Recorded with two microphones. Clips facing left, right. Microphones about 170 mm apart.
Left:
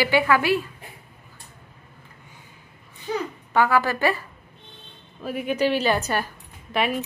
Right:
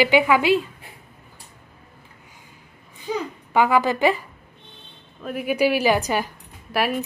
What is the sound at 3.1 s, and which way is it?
A child's voice, 15° right (ahead or behind).